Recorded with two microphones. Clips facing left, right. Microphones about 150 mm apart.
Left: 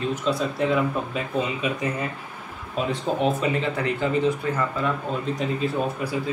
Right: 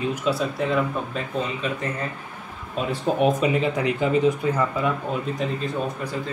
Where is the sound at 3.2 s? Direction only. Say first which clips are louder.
Right 3 dB; 15° right (ahead or behind).